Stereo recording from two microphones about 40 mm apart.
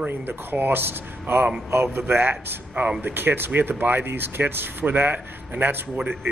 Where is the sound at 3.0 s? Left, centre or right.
Right.